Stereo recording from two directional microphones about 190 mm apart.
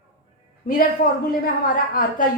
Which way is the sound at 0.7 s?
50° left (ahead or behind).